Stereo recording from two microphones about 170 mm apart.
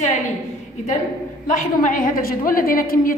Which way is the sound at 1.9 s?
55° left (ahead or behind).